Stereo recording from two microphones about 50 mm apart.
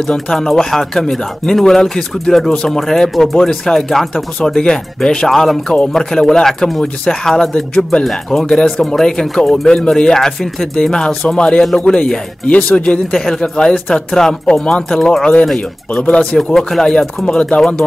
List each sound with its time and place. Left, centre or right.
0.1 s speech: centre
5.3 s a man's voice: centre; by 13.0 s left
13.1 s speech: centre
13.4 s speech: centre
16.0 s speech: left
16.5 s speech: centre